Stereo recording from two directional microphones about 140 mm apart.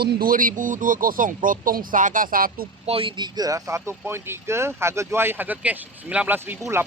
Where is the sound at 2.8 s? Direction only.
40° right (ahead or behind).